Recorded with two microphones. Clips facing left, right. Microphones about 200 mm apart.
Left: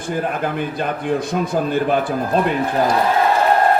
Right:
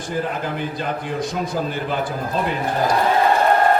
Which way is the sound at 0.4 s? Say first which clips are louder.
Left 3 dB; 55° left (ahead or behind).